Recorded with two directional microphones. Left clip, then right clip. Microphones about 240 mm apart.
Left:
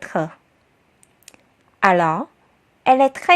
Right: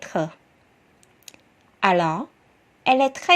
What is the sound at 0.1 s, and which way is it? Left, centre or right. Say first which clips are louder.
Speech: left 2 dB; left.